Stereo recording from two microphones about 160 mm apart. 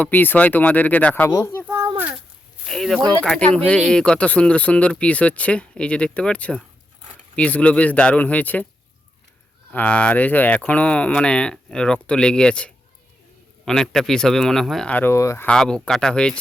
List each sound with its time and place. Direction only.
0.0 s a child's voice: 10° left (ahead or behind)
1.6 s a sound: 20° right (ahead or behind)
2.6 s speech: centre (ahead or behind)
9.7 s speech: 10° left (ahead or behind)
15.4 s speech: 5° left (ahead or behind)